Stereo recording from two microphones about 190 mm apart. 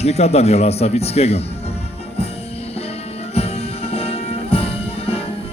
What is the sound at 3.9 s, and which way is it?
Music, 30° left (ahead or behind).